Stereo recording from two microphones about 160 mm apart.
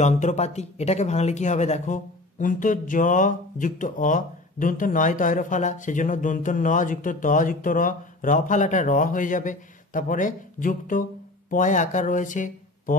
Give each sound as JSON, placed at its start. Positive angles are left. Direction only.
{"t": 0.0, "sound": "speech", "side_deg": 45}